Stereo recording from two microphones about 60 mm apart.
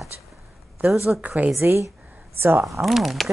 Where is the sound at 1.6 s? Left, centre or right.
Right.